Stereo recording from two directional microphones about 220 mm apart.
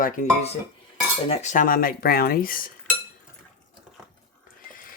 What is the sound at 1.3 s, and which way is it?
Speech, 30° left (ahead or behind).